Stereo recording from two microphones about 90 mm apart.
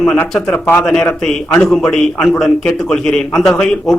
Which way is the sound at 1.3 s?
5° left (ahead or behind).